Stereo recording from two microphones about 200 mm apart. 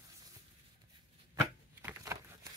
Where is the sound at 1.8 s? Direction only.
15° right (ahead or behind).